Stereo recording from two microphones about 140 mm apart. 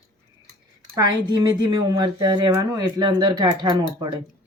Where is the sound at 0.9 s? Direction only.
30° right (ahead or behind).